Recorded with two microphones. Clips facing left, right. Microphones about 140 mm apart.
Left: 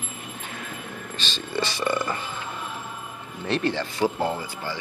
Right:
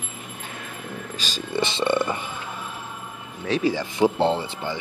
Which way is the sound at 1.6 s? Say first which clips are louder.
Right 3 dB; 20° right (ahead or behind).